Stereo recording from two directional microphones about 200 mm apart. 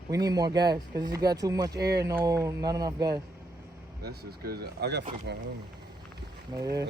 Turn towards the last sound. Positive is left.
turn(degrees=-20)  # may be behind; listen again after turning